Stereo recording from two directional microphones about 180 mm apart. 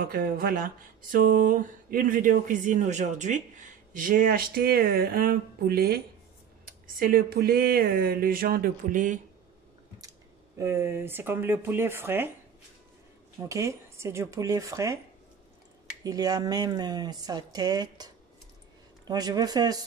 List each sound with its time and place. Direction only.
0.0 s speech: 50° right (ahead or behind)
10.6 s speech: 15° right (ahead or behind)
13.5 s speech: 15° right (ahead or behind)
16.0 s speech: 20° right (ahead or behind)